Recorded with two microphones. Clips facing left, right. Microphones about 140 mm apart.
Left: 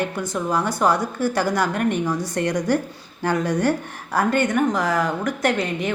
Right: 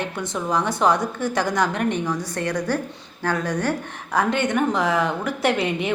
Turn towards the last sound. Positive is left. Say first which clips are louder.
# even
turn(degrees=0)  # may be behind; listen again after turning